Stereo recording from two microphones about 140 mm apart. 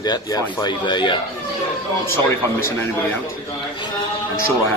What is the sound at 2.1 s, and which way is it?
Speech, 15° left (ahead or behind).